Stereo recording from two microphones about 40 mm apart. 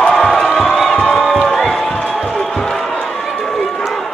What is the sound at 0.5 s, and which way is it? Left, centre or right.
Music, centre.